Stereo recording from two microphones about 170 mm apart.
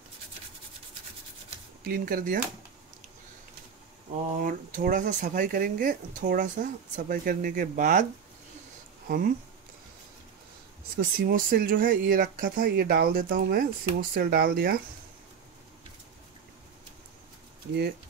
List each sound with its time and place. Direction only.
1.9 s speech: 60° right (ahead or behind)
4.4 s speech: 55° right (ahead or behind)
11.0 s speech: 55° right (ahead or behind)